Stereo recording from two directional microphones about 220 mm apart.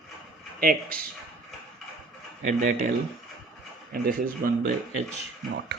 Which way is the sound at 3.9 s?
45° right (ahead or behind).